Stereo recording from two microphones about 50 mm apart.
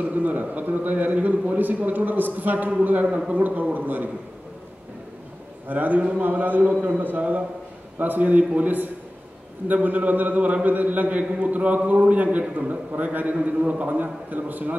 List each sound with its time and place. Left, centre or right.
0.0 s a man's voice: right
5.7 s a man's voice: right